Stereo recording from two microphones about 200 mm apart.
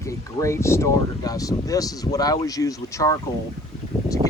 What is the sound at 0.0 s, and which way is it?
Speech, 15° left (ahead or behind).